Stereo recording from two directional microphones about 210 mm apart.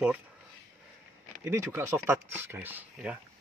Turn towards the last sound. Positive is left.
turn(degrees=-5)  # may be behind; listen again after turning